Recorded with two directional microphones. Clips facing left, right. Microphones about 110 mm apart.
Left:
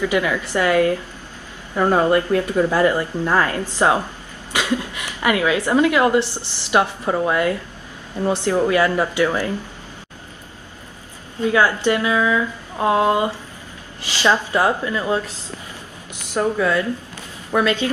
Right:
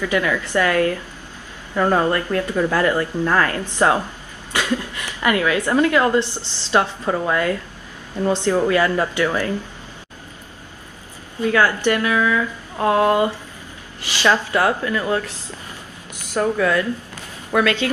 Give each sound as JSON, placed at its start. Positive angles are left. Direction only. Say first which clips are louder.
{"t": 0.0, "sound": "speech", "louder": "left 1 dB", "side_deg": 20}
{"t": 11.4, "sound": "speech", "louder": "even", "side_deg": 15}
{"t": 16.3, "sound": "speech", "louder": "even", "side_deg": 15}